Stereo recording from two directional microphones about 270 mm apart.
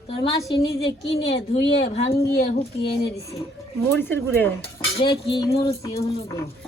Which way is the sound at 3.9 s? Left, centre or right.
Centre.